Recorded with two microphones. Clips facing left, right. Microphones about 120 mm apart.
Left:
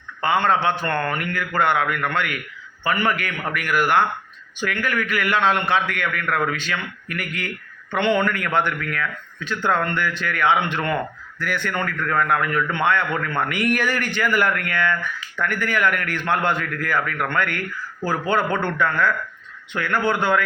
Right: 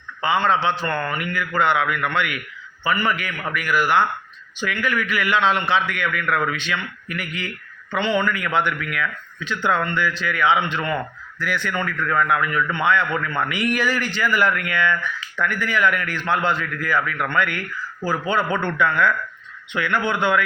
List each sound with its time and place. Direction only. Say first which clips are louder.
0.2 s speech: even; 50° left (ahead or behind)
2.8 s a man's voice: even; 55° left (ahead or behind)